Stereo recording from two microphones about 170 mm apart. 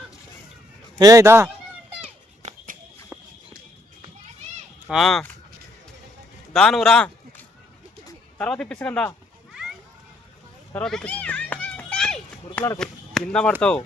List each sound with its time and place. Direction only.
0.9 s speech: 20° right (ahead or behind)
2.0 s children playing: 40° right (ahead or behind)
4.9 s a man's voice: centre (ahead or behind)
6.5 s a man's voice: 5° left (ahead or behind)
8.4 s speech: 5° left (ahead or behind)
10.8 s children playing: 5° left (ahead or behind)
12.5 s speech: 15° left (ahead or behind)
12.8 s a man's voice: 5° left (ahead or behind)